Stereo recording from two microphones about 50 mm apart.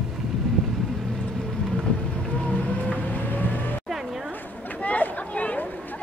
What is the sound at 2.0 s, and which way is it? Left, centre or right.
Music, left.